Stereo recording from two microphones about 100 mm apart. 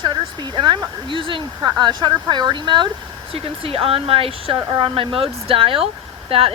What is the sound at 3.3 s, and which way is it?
Speech, 70° right (ahead or behind).